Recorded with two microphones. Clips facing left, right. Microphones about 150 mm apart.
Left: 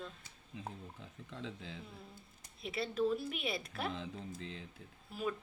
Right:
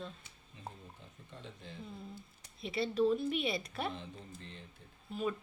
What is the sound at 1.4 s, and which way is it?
Speech, 90° left.